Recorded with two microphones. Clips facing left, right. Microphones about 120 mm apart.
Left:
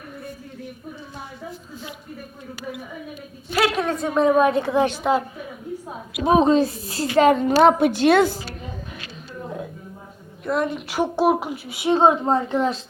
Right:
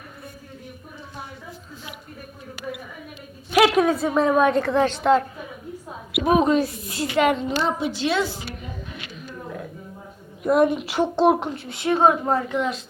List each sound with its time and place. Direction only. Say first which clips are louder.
3.6 s a woman's voice: right 4 dB; 10° right (ahead or behind)
4.7 s a woman's voice: right 1 dB; 15° left (ahead or behind)
6.1 s a woman's voice: left 2 dB; 30° left (ahead or behind)
7.3 s a woman's voice: left 9 dB; 60° left (ahead or behind)
10.4 s a woman's voice: right 5 dB; 15° right (ahead or behind)
10.8 s a woman's voice: right 1 dB; centre (ahead or behind)
11.9 s a woman's voice: left 2 dB; 25° left (ahead or behind)